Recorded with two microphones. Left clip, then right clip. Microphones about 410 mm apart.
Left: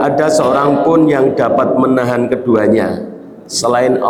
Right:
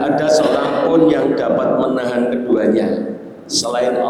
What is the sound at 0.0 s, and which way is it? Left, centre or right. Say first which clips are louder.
A man's voice: left 2 dB; left.